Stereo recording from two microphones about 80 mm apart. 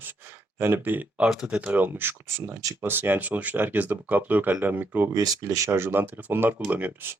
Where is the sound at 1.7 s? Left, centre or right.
Right.